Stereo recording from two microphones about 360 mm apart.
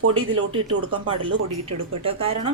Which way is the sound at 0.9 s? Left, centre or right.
Centre.